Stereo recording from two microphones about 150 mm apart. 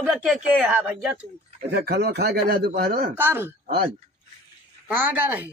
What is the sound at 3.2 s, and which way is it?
Speech, 15° right (ahead or behind).